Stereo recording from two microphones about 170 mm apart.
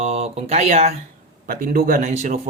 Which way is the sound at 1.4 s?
65° right (ahead or behind).